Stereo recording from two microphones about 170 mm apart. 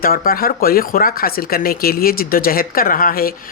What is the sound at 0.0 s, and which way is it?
Speech, 60° left (ahead or behind).